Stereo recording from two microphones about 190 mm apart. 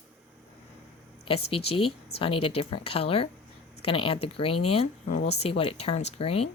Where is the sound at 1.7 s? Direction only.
30° left (ahead or behind).